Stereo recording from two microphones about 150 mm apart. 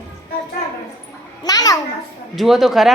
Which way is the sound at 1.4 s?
25° left (ahead or behind).